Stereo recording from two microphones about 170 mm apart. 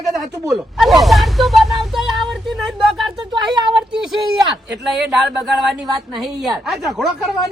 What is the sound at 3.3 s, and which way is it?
Speech, 25° right (ahead or behind).